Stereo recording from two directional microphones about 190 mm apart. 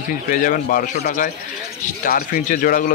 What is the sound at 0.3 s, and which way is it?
Speech, 45° left (ahead or behind).